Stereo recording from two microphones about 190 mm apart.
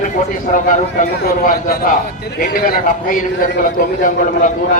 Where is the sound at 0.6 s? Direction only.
50° left (ahead or behind).